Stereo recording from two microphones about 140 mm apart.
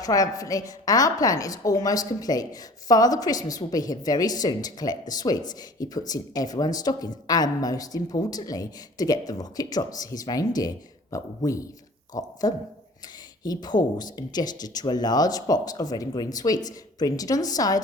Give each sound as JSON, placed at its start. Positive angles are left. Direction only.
{"t": 0.0, "sound": "a woman's voice", "side_deg": 25}